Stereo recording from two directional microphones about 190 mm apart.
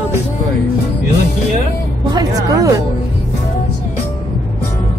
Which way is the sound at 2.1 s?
20° right (ahead or behind).